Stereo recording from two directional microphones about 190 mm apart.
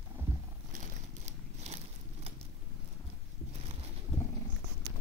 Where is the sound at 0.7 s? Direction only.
35° right (ahead or behind).